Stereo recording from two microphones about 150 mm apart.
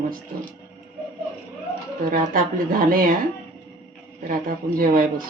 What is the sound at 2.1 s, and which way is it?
A woman's voice, 70° right (ahead or behind).